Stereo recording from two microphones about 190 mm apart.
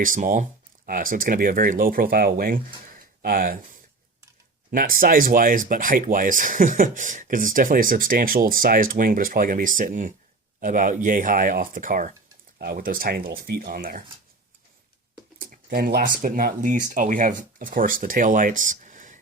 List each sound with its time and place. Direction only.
0.0 s speech: 45° right (ahead or behind)
4.7 s speech: 45° right (ahead or behind)
15.7 s speech: 50° right (ahead or behind)